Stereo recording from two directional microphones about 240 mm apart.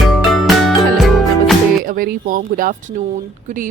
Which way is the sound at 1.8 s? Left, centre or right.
Right.